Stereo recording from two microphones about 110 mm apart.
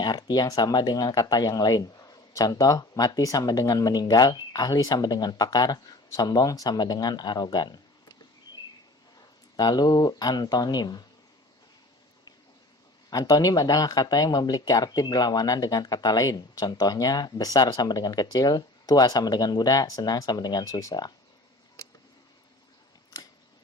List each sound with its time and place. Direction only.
0.0 s speech: 40° left (ahead or behind)
9.6 s speech: 40° left (ahead or behind)
13.1 s speech: 35° left (ahead or behind)